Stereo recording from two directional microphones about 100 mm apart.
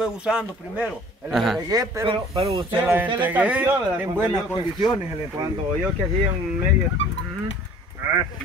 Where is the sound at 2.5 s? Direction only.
60° right (ahead or behind).